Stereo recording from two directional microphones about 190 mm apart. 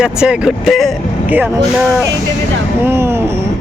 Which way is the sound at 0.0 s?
5° right (ahead or behind).